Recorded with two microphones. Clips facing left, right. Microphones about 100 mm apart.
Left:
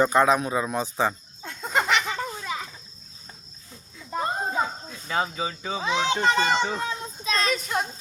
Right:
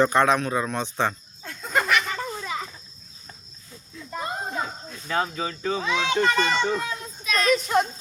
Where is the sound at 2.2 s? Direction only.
5° left (ahead or behind).